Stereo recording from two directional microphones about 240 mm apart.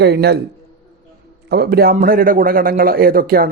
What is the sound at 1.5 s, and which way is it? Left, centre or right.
A man's voice, right.